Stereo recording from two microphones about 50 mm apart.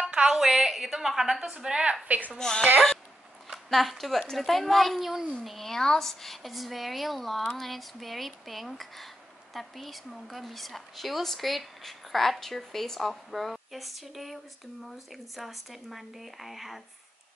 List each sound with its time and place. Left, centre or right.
0.0 s a sound: centre
0.4 s a woman's voice: centre
2.0 s a woman's voice: right
2.3 s a woman's voice: centre
3.5 s a woman's voice: centre